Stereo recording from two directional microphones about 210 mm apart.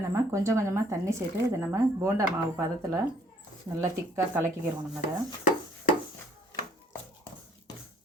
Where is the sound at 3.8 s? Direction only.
10° right (ahead or behind).